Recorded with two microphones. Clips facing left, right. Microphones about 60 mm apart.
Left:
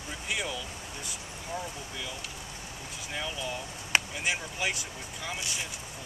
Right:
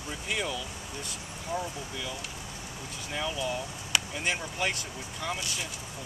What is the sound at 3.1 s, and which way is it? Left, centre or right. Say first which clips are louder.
Speech: right 3 dB; centre.